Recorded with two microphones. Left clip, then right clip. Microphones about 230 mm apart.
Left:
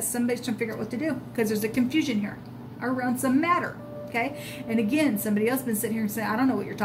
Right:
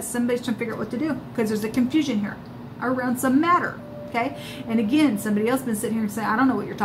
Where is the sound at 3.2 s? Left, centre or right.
Left.